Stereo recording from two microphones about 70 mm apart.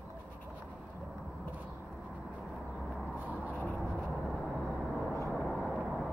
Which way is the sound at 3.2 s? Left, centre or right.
Right.